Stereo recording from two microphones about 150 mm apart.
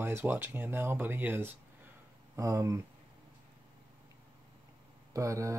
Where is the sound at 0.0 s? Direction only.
15° right (ahead or behind).